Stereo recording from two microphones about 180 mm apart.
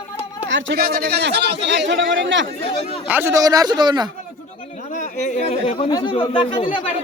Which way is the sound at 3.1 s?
15° right (ahead or behind).